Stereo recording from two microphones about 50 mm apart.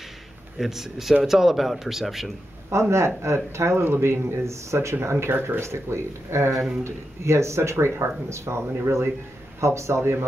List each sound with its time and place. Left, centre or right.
0.6 s a man's voice: centre
2.7 s speech: right
3.8 s speech: right
5.0 s speech: right
8.3 s speech: right
8.8 s a man's voice: right
9.6 s speech: right